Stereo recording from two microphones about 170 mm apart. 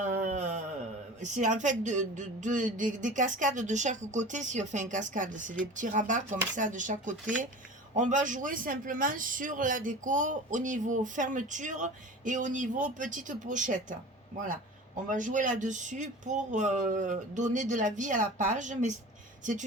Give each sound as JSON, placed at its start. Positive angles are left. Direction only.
{"t": 0.0, "sound": "a sound", "side_deg": -45}
{"t": 1.2, "sound": "a man's voice", "side_deg": -45}
{"t": 15.1, "sound": "a man's voice", "side_deg": -50}